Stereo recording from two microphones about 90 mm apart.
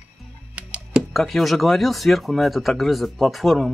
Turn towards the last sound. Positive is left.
turn(degrees=0)  # may be behind; listen again after turning